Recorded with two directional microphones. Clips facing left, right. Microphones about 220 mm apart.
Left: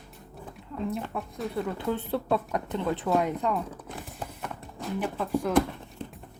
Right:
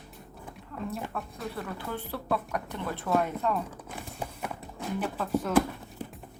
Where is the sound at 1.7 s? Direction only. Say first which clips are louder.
Left 7 dB; 20° left (ahead or behind).